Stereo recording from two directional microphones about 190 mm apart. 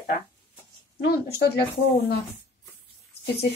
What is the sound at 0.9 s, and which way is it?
Speech, 55° left (ahead or behind).